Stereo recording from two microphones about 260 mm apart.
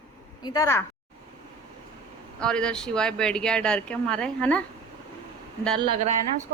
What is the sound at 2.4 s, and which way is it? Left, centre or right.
Speech, centre.